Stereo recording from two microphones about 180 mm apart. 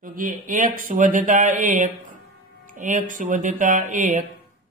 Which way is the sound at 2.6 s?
45° right (ahead or behind).